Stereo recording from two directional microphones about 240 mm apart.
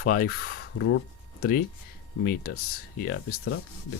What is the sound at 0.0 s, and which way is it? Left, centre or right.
Speech, left.